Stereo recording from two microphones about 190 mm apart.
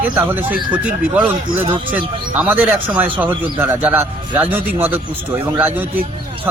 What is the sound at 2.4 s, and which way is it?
A man's voice, 10° right (ahead or behind).